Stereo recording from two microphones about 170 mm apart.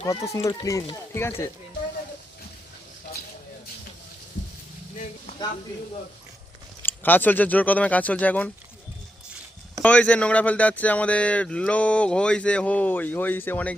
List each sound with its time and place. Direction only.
0.0 s speech: 20° left (ahead or behind)
6.8 s speech: 10° left (ahead or behind)
9.8 s speech: 10° left (ahead or behind)